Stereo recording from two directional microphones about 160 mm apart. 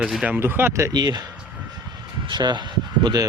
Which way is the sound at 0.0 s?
5° right (ahead or behind).